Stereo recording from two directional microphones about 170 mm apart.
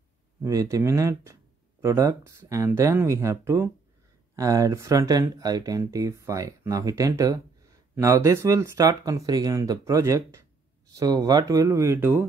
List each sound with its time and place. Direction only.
0.4 s speech: 20° right (ahead or behind)